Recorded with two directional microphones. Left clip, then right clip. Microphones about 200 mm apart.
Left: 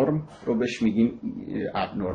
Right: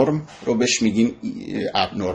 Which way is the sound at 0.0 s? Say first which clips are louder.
Right 5 dB; 45° right (ahead or behind).